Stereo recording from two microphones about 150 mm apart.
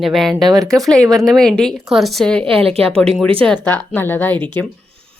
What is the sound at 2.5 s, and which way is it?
Speech, 40° right (ahead or behind).